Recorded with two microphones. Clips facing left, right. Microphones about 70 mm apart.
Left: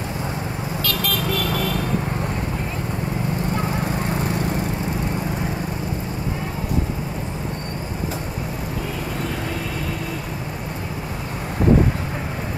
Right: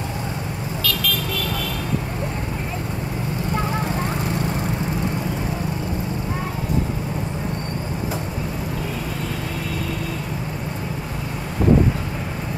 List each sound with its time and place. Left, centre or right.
0.8 s vehicle: left